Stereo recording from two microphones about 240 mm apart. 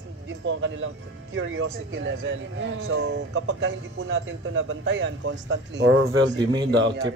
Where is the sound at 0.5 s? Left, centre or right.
Right.